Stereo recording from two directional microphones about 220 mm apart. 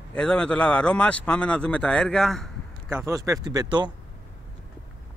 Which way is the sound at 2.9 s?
10° right (ahead or behind).